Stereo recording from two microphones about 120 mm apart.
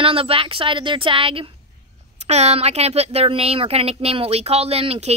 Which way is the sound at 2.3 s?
65° right (ahead or behind).